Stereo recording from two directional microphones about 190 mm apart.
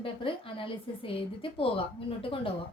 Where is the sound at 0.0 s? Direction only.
30° left (ahead or behind).